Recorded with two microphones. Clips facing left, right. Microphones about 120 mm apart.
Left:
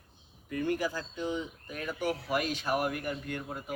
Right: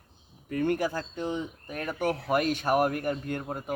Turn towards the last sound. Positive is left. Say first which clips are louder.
# right 5 dB
turn(degrees=-45)  # may be behind; listen again after turning